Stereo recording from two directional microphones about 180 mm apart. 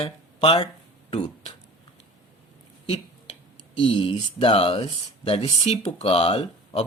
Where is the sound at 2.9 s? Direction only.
35° left (ahead or behind).